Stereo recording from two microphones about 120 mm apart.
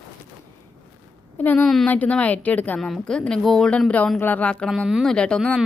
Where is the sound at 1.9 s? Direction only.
10° left (ahead or behind).